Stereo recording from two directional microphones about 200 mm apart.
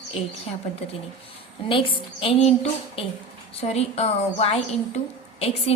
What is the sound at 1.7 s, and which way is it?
A woman's voice, 25° left (ahead or behind).